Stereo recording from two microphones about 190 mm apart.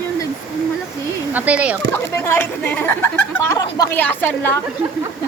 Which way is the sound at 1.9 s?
10° left (ahead or behind).